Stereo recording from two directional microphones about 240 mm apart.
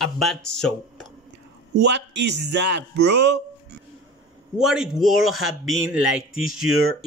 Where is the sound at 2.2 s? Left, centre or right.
Right.